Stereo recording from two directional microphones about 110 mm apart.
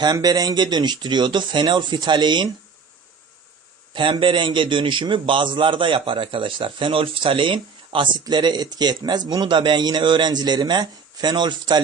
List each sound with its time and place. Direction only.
0.0 s speech: 40° right (ahead or behind)
3.9 s a man's voice: 50° right (ahead or behind)